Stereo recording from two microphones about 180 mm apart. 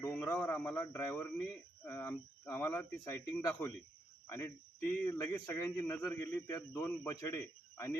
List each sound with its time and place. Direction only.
0.0 s speech: 10° left (ahead or behind)